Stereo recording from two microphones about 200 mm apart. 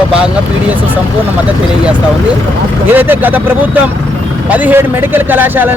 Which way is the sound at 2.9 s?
10° right (ahead or behind).